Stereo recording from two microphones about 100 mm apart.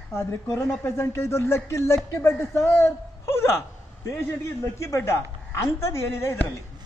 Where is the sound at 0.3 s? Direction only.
25° left (ahead or behind).